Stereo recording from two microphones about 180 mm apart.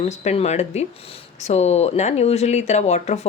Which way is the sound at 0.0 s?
35° left (ahead or behind).